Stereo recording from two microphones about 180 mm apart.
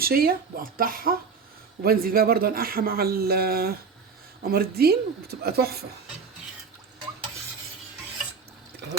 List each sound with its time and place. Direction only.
0.0 s speech: 55° right (ahead or behind)